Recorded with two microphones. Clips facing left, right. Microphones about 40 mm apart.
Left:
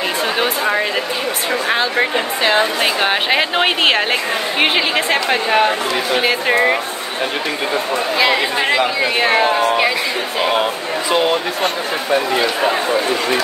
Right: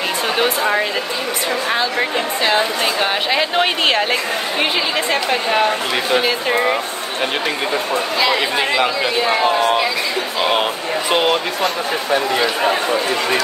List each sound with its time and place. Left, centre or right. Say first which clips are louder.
0.4 s speech: right 2 dB; centre
1.5 s a woman's voice: left 2 dB; centre
9.1 s speech: left 2 dB; left